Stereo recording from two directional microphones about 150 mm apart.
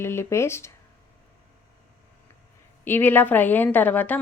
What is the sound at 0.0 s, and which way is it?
Speech, 15° left (ahead or behind).